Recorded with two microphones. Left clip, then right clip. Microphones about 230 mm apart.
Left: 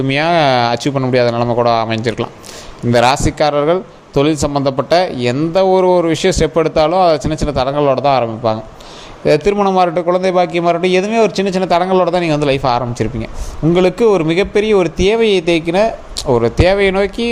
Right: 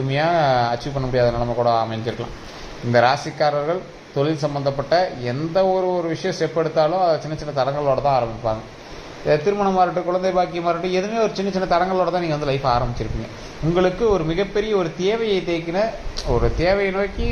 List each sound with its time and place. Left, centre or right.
0.1 s speech: left